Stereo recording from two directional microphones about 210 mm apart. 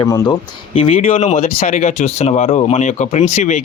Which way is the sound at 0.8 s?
30° left (ahead or behind).